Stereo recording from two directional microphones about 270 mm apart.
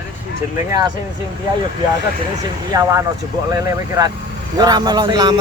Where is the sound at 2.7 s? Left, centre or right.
Centre.